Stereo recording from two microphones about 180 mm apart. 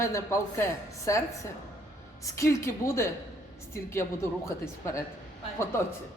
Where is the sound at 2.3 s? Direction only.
15° left (ahead or behind).